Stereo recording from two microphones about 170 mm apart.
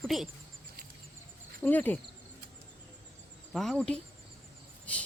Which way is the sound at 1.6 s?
10° left (ahead or behind).